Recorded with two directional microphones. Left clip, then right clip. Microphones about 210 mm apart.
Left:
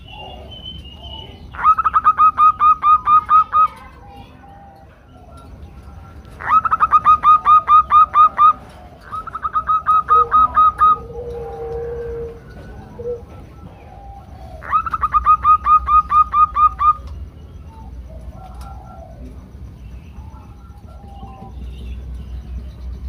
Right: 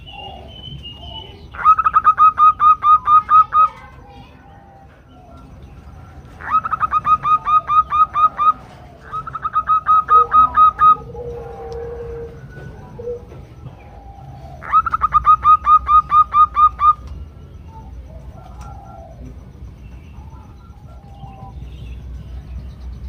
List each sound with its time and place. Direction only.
1.5 s bird: 15° left (ahead or behind)
6.4 s bird: 25° left (ahead or behind)
9.4 s bird: centre (ahead or behind)
14.6 s bird: 5° right (ahead or behind)